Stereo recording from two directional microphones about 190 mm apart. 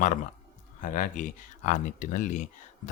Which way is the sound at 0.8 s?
45° left (ahead or behind).